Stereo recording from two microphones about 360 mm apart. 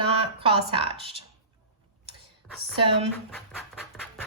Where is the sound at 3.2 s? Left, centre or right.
Centre.